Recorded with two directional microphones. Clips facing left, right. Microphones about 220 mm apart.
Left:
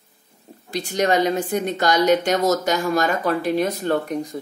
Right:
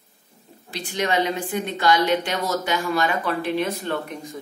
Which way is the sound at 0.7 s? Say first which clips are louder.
Left 4 dB; 45° left (ahead or behind).